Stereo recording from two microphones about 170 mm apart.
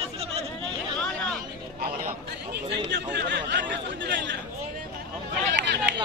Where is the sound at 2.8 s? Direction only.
90° right.